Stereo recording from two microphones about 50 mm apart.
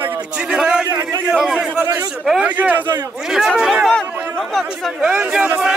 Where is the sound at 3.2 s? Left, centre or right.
Centre.